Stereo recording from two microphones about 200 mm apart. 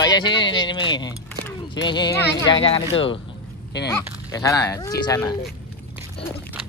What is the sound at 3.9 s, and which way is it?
Speech, 15° left (ahead or behind).